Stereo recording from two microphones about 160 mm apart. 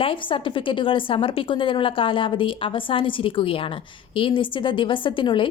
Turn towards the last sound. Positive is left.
turn(degrees=30)  # may be behind; listen again after turning